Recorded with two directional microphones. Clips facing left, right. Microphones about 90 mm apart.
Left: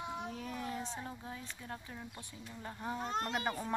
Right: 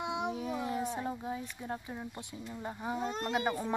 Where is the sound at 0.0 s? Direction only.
80° right.